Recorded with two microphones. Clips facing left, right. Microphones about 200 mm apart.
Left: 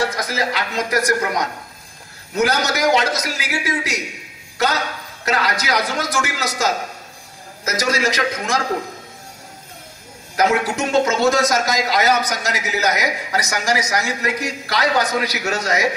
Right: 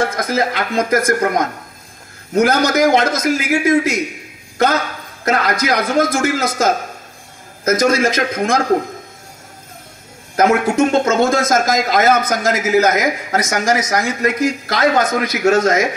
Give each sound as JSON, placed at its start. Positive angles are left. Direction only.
{"t": 0.0, "sound": "a man's voice", "side_deg": -50}
{"t": 10.4, "sound": "a man's voice", "side_deg": -50}